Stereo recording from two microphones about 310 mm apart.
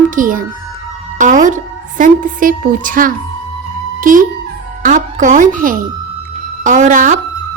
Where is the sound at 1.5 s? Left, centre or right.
Right.